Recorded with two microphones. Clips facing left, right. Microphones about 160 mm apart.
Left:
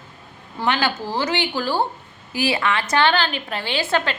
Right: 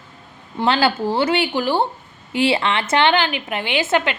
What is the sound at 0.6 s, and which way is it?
Speech, 30° right (ahead or behind).